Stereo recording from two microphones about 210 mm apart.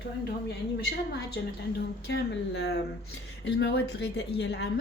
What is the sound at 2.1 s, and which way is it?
A woman's voice, 55° left (ahead or behind).